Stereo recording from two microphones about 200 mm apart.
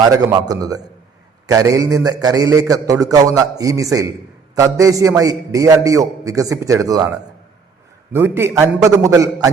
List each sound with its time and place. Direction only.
0.1 s a man's voice: 15° right (ahead or behind)
8.1 s a man's voice: 10° right (ahead or behind)